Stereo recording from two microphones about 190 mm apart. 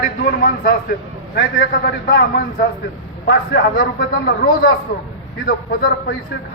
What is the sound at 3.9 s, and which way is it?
Speech, 55° left (ahead or behind).